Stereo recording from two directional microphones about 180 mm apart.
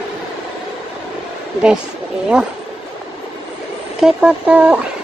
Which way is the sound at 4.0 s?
5° right (ahead or behind).